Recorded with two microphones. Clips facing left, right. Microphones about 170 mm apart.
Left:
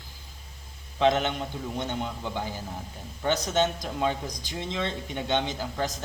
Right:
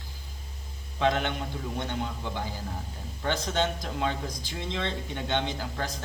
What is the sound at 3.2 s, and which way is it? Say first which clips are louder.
A man's voice: left 3 dB; 20° left (ahead or behind).